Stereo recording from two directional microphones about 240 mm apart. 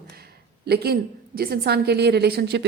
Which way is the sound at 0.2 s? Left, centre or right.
Right.